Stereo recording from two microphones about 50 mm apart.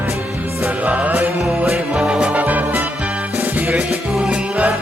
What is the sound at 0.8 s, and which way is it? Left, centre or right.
Music, right.